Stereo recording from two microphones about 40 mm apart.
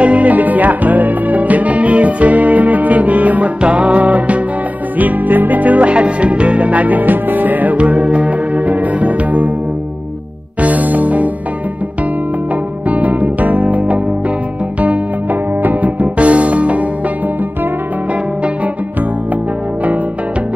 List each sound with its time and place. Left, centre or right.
0.0 s music: right
10.6 s music: right
12.8 s music: right
15.6 s music: right